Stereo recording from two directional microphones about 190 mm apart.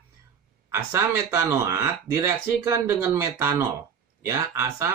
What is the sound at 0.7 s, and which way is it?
Speech, 15° right (ahead or behind).